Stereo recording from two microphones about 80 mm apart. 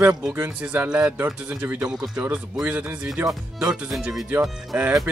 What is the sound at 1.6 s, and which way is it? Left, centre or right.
Speech, right.